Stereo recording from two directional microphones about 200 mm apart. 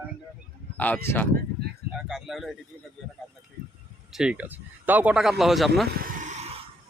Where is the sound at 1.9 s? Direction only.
Centre (ahead or behind).